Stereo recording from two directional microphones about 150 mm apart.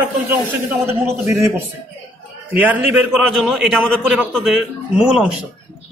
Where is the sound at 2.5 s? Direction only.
10° right (ahead or behind).